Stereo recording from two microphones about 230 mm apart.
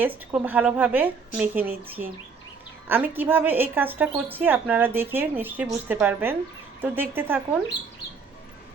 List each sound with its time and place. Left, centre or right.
0.3 s a woman's voice: centre